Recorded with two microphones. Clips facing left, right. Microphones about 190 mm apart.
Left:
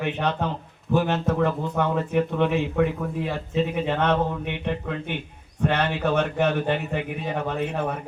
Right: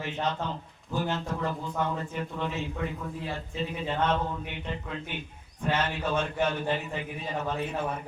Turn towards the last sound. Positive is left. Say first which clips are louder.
# left 4 dB
turn(degrees=60)  # may be behind; listen again after turning